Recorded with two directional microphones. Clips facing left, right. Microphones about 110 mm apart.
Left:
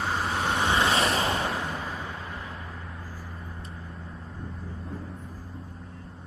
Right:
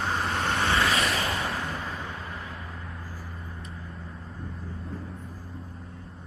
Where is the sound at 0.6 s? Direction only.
25° left (ahead or behind).